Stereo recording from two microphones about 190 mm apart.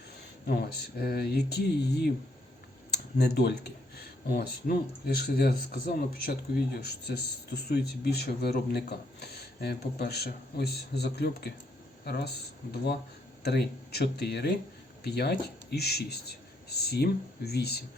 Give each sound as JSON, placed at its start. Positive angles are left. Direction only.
{"t": 0.4, "sound": "speech", "side_deg": 55}
{"t": 13.4, "sound": "speech", "side_deg": 60}